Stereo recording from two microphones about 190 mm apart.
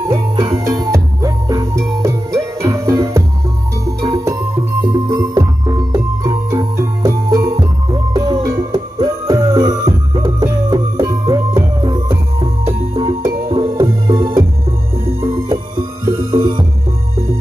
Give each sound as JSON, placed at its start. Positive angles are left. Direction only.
{"t": 0.1, "sound": "music", "side_deg": -25}